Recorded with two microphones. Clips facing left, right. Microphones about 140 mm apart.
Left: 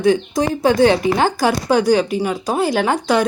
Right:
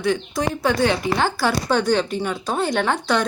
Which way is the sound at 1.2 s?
15° left (ahead or behind).